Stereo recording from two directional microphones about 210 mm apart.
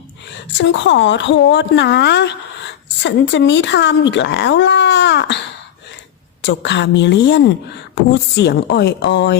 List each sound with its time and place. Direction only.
0.5 s a woman's voice: 60° left (ahead or behind)
6.4 s a woman's voice: 60° left (ahead or behind)